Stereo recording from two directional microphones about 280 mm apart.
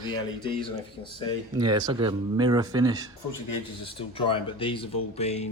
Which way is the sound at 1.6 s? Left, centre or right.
Right.